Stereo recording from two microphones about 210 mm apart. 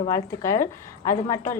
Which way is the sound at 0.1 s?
15° left (ahead or behind).